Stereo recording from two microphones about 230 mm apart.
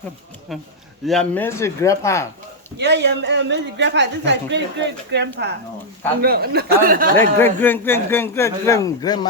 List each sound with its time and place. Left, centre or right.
1.0 s a man's voice: centre
2.7 s a woman's voice: right
7.3 s a man's voice: centre